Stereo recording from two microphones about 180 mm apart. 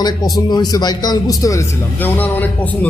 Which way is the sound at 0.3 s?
20° left (ahead or behind).